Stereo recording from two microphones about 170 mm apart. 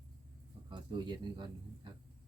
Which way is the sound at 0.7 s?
25° right (ahead or behind).